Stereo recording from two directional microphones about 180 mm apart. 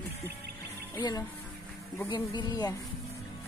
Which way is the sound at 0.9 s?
20° left (ahead or behind).